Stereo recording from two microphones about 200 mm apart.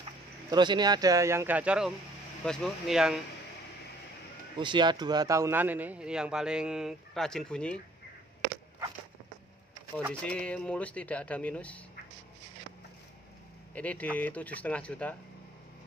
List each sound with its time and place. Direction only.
0.5 s a man's voice: 20° right (ahead or behind); by 3.2 s centre (ahead or behind)
4.6 s speech: 25° right (ahead or behind); by 7.8 s 5° left (ahead or behind)
10.2 s speech: 5° left (ahead or behind)
13.7 s speech: 5° left (ahead or behind)